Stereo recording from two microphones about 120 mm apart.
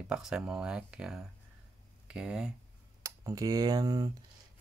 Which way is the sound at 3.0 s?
30° right (ahead or behind).